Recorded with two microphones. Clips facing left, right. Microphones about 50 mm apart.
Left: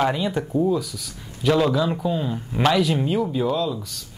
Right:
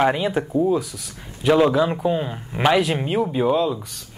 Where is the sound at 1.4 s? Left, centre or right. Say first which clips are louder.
Right 3 dB; right.